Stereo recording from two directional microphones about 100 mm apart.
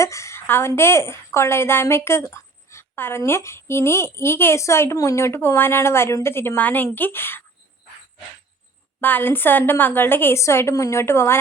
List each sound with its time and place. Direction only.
0.0 s a sound: 30° left (ahead or behind)
0.8 s a woman's voice: 25° left (ahead or behind)
9.0 s a woman's voice: 20° left (ahead or behind)